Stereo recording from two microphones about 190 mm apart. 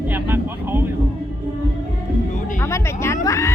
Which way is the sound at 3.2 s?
15° left (ahead or behind).